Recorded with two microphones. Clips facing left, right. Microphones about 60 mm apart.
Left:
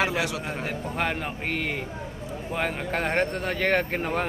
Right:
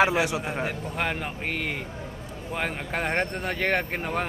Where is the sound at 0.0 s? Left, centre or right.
Centre.